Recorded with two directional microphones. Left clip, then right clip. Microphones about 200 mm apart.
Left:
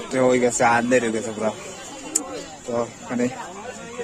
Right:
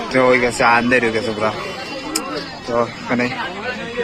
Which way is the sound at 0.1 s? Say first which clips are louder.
Right 4 dB; 20° left (ahead or behind).